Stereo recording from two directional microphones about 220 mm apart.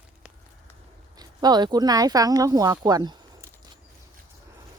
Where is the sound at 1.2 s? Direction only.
20° right (ahead or behind).